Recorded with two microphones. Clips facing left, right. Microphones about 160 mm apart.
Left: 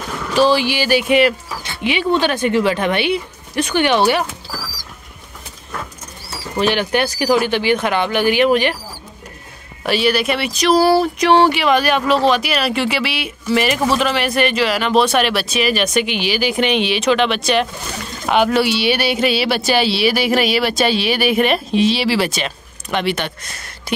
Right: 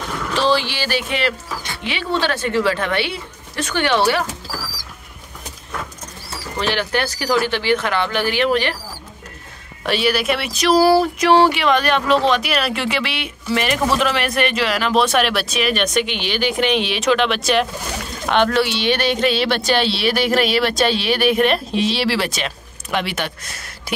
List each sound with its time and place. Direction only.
0.3 s speech: 10° left (ahead or behind)
6.6 s speech: 15° left (ahead or behind)
9.8 s a sound: centre (ahead or behind)